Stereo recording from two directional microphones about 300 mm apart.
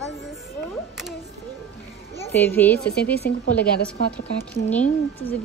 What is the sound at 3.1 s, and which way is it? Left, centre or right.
Speech, left.